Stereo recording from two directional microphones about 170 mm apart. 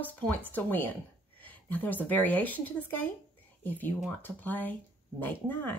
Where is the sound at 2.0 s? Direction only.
10° left (ahead or behind).